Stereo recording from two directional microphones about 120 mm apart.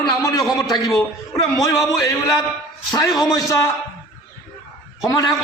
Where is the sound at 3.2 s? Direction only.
30° left (ahead or behind).